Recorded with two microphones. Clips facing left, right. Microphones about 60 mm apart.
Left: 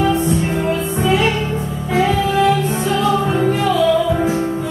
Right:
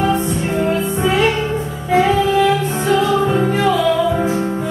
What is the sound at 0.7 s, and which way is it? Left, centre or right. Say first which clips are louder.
Music: right 1 dB; right.